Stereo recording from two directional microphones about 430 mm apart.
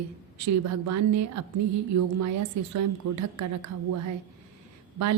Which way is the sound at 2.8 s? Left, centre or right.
Right.